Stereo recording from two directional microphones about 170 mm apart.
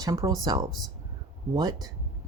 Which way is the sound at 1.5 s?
25° right (ahead or behind).